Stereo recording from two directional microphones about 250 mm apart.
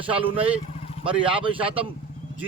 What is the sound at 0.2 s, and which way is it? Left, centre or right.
A man's voice, right.